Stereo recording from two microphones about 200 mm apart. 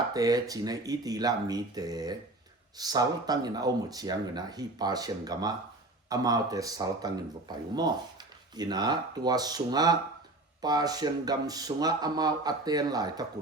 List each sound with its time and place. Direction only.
0.1 s speech: 20° right (ahead or behind)